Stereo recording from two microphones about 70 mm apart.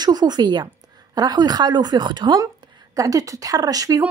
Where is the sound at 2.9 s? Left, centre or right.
Right.